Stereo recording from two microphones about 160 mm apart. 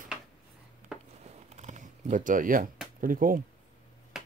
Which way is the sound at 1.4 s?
45° right (ahead or behind).